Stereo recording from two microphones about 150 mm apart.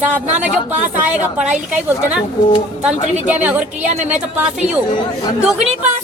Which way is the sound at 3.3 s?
10° right (ahead or behind).